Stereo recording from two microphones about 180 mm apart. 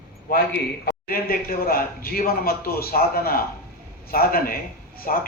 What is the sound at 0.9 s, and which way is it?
A man's voice, 55° left (ahead or behind).